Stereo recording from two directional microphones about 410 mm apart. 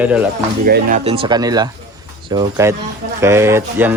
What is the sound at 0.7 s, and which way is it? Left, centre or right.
Speech, centre.